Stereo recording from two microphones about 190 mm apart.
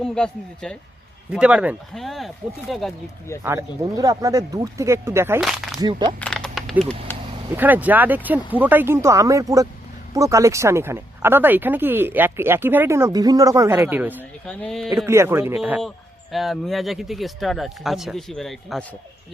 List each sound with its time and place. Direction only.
0.0 s speech: 5° left (ahead or behind)
3.4 s speech: 15° right (ahead or behind)
5.4 s a sound: centre (ahead or behind)
5.8 s speech: 25° right (ahead or behind)
6.1 s a sound: 5° left (ahead or behind)
7.5 s speech: 10° right (ahead or behind)
14.2 s speech: 5° left (ahead or behind)
14.8 s speech: 15° right (ahead or behind)